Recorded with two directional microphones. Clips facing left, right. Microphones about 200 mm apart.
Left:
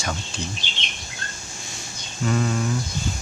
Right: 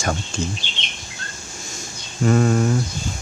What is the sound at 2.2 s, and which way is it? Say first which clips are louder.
Speech: right 6 dB; 45° right (ahead or behind).